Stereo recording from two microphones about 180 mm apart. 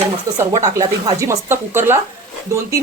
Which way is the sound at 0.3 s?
20° right (ahead or behind).